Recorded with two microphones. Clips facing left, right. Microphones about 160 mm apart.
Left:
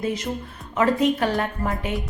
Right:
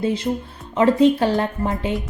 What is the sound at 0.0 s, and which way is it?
A woman's voice, 30° right (ahead or behind).